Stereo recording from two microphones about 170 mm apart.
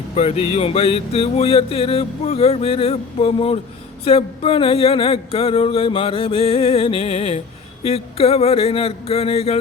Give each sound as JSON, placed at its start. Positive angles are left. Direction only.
{"t": 0.2, "sound": "music", "side_deg": 35}